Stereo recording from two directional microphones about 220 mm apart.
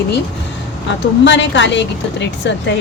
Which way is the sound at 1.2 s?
55° left (ahead or behind).